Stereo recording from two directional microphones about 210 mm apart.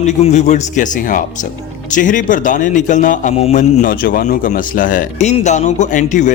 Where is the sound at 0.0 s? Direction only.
35° left (ahead or behind).